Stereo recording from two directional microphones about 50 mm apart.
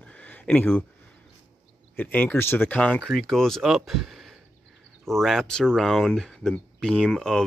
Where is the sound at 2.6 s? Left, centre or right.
Left.